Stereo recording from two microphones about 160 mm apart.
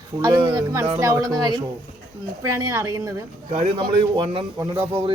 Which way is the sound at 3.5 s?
35° right (ahead or behind).